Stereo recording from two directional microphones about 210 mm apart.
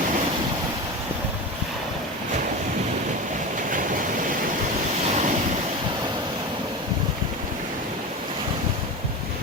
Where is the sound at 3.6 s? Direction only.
40° right (ahead or behind).